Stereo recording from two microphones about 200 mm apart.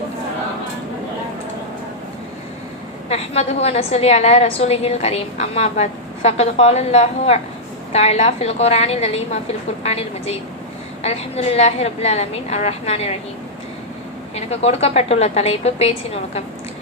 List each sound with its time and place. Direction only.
3.1 s a woman's voice: 30° left (ahead or behind)
11.5 s a woman's voice: 30° left (ahead or behind)
14.3 s a woman's voice: 30° left (ahead or behind)